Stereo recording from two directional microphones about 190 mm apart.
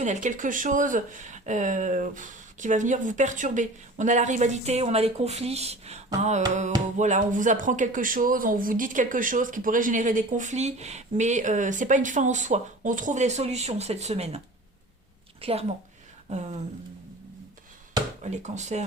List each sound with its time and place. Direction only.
0.0 s a woman's voice: 40° right (ahead or behind)
18.2 s speech: 35° right (ahead or behind)